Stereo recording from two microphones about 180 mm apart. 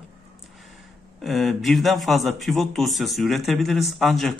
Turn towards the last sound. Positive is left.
turn(degrees=0)  # may be behind; listen again after turning